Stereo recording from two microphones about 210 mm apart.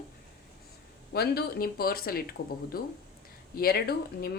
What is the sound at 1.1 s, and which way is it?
A woman's voice, 50° left (ahead or behind).